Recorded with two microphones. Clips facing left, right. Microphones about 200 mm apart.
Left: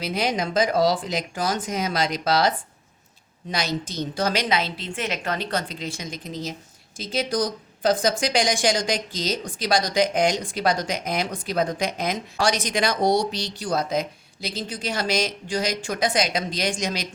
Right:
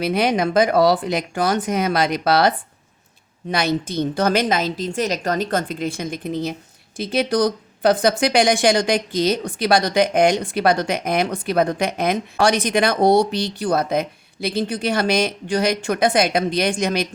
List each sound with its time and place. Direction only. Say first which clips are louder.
0.0 s a woman's voice: right 6 dB; 60° right (ahead or behind)